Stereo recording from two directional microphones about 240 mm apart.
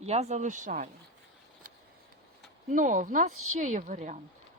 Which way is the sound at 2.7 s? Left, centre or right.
Right.